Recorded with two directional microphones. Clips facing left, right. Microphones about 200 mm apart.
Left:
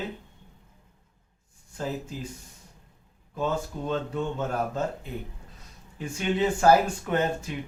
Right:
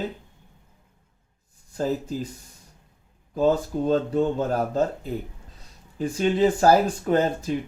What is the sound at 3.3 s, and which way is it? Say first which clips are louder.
Speech: right 8 dB; 35° right (ahead or behind).